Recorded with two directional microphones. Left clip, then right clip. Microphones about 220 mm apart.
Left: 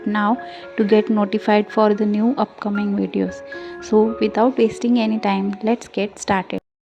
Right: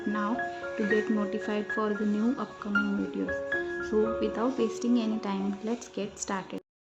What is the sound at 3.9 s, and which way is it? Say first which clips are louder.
A woman's voice: left 12 dB; 30° left (ahead or behind).